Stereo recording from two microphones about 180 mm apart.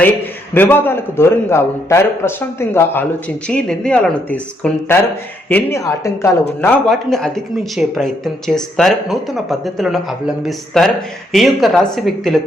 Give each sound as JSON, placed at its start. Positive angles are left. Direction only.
{"t": 0.5, "sound": "a man's voice", "side_deg": 10}
{"t": 6.6, "sound": "speech", "side_deg": 5}